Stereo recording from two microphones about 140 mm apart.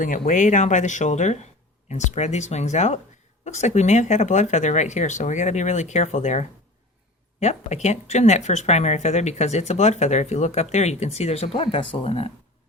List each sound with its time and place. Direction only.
0.0 s speech: 70° left (ahead or behind); by 12.3 s 45° left (ahead or behind)